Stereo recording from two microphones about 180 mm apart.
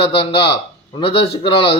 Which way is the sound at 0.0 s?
30° left (ahead or behind).